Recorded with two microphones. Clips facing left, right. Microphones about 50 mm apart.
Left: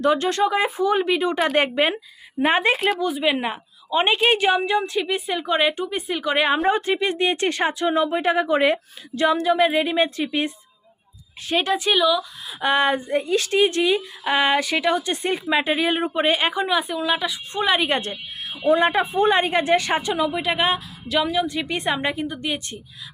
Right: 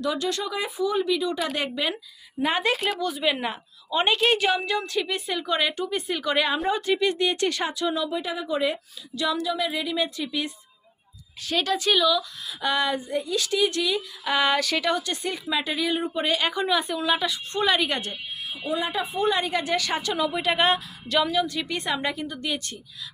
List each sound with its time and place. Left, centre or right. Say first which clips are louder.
0.0 s speech: left 8 dB; left
3.0 s a woman's voice: left 4 dB; centre
6.7 s speech: left 3 dB; left
9.1 s speech: left 7 dB; left
11.4 s a woman's voice: left 3 dB; left
12.5 s speech: left 6 dB; left
15.1 s speech: left 6 dB; left
16.6 s a woman's voice: left 2 dB; centre
17.8 s speech: left 5 dB; left
18.4 s a woman's voice: left 10 dB; left; by 21.4 s centre
21.4 s a woman's voice: left 4 dB; left